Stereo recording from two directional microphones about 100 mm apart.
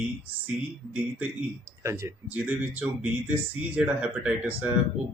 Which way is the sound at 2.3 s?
15° right (ahead or behind).